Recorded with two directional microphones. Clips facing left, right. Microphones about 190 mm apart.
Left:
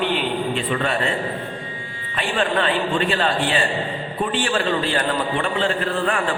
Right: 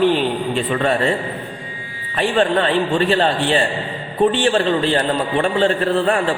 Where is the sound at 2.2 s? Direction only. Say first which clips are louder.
Right 5 dB; 35° right (ahead or behind).